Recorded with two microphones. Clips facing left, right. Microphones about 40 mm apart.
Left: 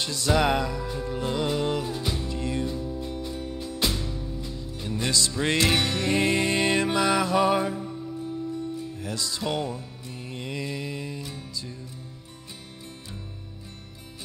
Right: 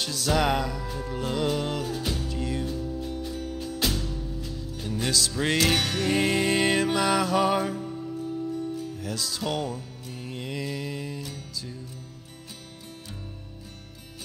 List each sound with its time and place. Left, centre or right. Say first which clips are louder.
0.0 s music: left 1 dB; centre
2.3 s music: left 1 dB; centre
2.6 s music: left 1 dB; centre